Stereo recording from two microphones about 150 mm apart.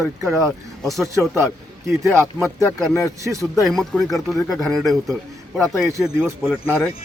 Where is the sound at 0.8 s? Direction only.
Centre (ahead or behind).